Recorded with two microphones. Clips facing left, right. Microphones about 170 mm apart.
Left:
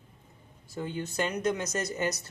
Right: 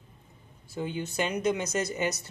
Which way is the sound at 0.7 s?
20° right (ahead or behind).